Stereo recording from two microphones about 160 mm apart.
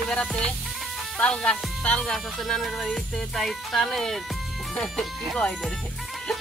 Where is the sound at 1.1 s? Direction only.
5° left (ahead or behind).